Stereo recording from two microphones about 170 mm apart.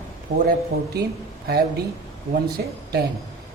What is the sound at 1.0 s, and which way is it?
Speech, 70° right (ahead or behind).